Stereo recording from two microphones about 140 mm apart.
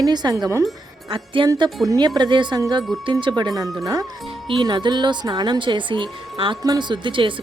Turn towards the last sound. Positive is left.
turn(degrees=-35)  # may be behind; listen again after turning